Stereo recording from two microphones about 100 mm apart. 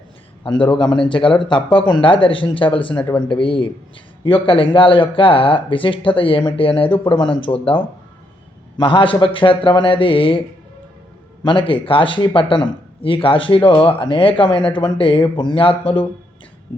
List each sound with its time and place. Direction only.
0.4 s speech: 55° left (ahead or behind)
11.4 s speech: 60° left (ahead or behind)